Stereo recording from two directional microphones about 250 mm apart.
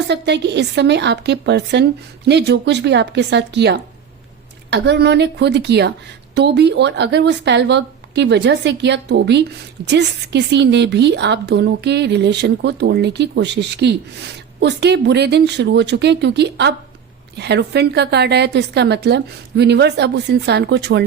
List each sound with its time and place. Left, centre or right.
0.1 s a woman's voice: right